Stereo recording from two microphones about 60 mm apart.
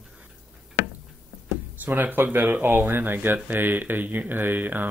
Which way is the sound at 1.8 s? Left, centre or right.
Right.